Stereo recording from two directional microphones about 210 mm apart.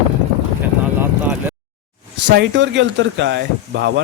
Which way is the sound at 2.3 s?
55° right (ahead or behind).